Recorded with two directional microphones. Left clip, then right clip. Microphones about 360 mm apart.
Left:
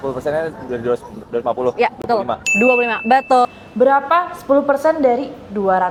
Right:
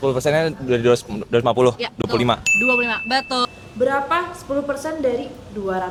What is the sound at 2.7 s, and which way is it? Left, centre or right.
Speech, left.